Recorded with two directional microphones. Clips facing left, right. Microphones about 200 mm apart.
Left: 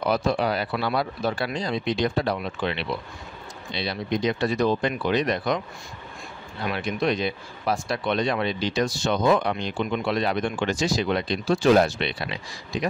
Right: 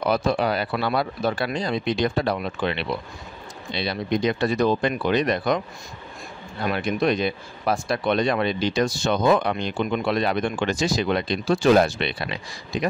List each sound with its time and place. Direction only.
0.1 s speech: 55° right (ahead or behind)
6.6 s speech: 50° right (ahead or behind)